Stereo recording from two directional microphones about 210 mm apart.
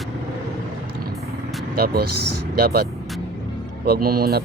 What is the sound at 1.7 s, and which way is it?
Speech, 45° right (ahead or behind).